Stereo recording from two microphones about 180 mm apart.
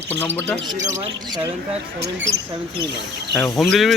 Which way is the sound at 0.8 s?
20° right (ahead or behind).